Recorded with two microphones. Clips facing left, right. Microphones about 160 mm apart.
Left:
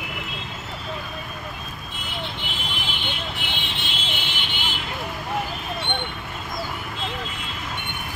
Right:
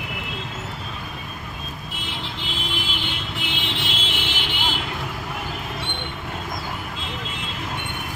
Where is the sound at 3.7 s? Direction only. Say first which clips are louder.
Right 3 dB; 90° right.